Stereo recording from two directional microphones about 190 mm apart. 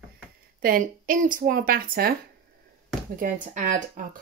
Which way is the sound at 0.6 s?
50° right (ahead or behind).